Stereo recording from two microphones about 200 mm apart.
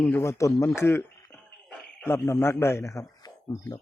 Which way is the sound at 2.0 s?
10° left (ahead or behind).